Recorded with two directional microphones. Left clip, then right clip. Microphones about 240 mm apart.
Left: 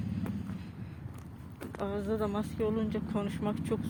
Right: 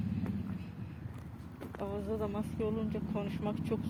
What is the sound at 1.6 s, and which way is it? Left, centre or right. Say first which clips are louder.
Speech: left 4 dB; centre.